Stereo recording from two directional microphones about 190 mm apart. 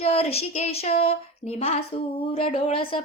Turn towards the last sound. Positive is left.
turn(degrees=30)  # may be behind; listen again after turning